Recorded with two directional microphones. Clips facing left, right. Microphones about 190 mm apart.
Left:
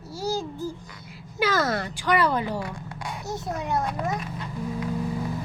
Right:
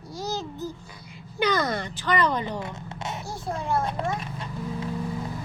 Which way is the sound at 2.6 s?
25° right (ahead or behind).